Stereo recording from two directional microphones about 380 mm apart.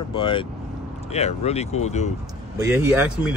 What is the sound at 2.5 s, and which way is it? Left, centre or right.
Speech, centre.